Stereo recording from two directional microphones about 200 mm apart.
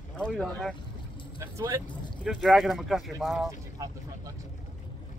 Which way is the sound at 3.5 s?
15° right (ahead or behind).